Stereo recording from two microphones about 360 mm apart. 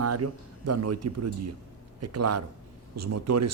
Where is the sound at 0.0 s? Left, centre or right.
Right.